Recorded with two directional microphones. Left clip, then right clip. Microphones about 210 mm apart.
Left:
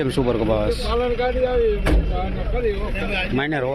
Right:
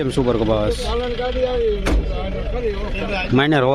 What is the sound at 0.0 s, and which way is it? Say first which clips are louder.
Speech: right 2 dB; 20° right (ahead or behind).